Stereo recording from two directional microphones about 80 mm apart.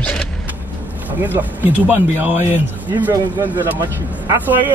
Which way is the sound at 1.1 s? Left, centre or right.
Right.